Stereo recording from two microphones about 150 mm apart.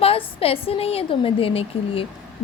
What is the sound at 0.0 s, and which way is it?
A woman's voice, 40° left (ahead or behind).